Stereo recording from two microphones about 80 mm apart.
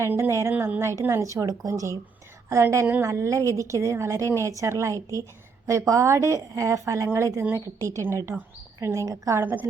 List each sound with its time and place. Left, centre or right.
0.1 s a woman's voice: right
9.4 s a woman's voice: right